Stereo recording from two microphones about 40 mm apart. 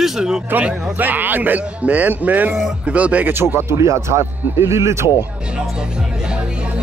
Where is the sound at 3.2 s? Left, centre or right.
Right.